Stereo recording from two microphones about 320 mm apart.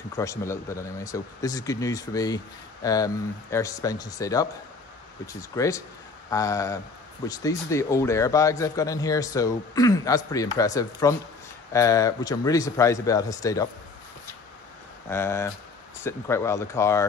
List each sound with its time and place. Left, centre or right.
0.1 s speech: centre
15.0 s speech: centre